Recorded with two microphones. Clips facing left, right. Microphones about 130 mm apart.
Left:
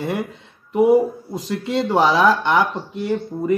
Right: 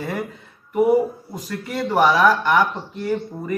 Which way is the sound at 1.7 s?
25° left (ahead or behind).